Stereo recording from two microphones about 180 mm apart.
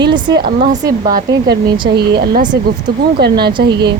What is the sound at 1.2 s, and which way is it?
A woman's voice, 65° right (ahead or behind).